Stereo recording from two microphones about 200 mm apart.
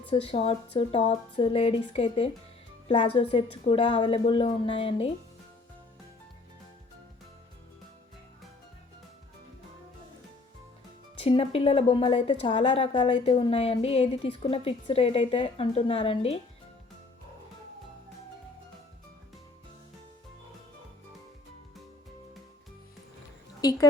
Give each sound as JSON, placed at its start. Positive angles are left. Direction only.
{"t": 0.1, "sound": "speech", "side_deg": 30}
{"t": 11.3, "sound": "speech", "side_deg": 30}